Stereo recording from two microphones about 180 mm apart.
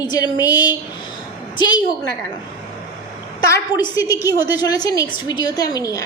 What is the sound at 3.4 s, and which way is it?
A woman's voice, 20° left (ahead or behind).